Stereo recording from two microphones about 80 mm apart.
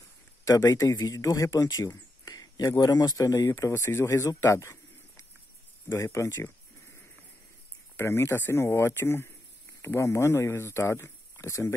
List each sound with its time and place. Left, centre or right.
0.7 s a man's voice: left
4.5 s a sound: left
5.9 s a man's voice: left
7.9 s a man's voice: left